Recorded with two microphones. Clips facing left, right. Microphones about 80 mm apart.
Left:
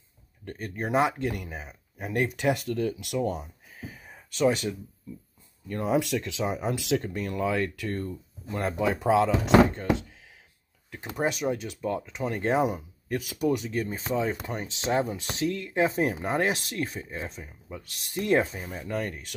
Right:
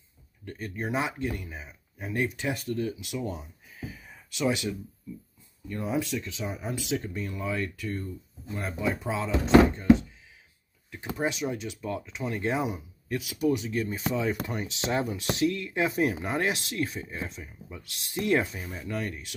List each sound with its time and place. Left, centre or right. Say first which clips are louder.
0.5 s speech: left 3 dB; left
3.2 s speech: left 7 dB; left
3.9 s a sound: even; left
5.7 s speech: left 4 dB; left
7.0 s speech: left 5 dB; left
11.1 s speech: left 3 dB; left